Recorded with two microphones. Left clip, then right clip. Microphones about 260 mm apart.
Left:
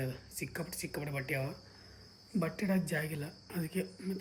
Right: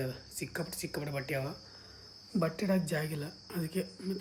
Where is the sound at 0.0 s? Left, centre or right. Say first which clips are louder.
Right 2 dB; centre.